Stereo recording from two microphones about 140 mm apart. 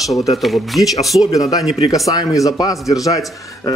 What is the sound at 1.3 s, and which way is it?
A man's voice, 25° left (ahead or behind).